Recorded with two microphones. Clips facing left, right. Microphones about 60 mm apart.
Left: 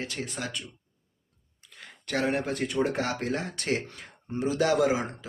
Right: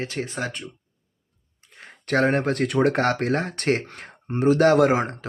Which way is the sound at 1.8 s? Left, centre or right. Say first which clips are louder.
Right 8 dB; right.